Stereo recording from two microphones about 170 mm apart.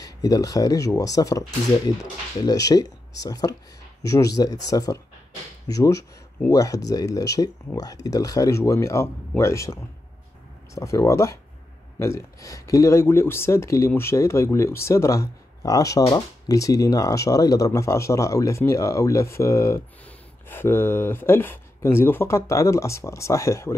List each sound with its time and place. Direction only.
0.0 s speech: 20° left (ahead or behind)
2.4 s speech: 20° left (ahead or behind)